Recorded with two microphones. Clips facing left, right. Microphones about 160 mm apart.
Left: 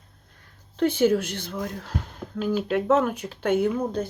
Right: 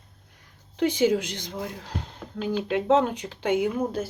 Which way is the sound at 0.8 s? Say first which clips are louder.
Left 1 dB; 15° right (ahead or behind).